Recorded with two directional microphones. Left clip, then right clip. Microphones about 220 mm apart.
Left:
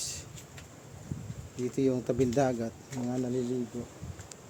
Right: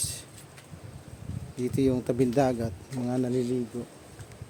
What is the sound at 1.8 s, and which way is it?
Speech, 20° right (ahead or behind).